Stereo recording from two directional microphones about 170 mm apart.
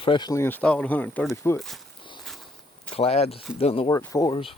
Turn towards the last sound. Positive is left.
turn(degrees=30)  # may be behind; listen again after turning